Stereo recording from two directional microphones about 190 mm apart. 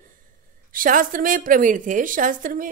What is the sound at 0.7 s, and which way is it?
A woman's voice, 45° right (ahead or behind).